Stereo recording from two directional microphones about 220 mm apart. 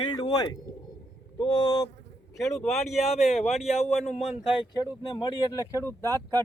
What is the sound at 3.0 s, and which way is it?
Speech, 30° left (ahead or behind).